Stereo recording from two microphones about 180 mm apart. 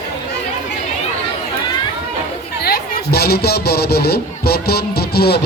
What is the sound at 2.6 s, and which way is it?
Speech, 60° left (ahead or behind).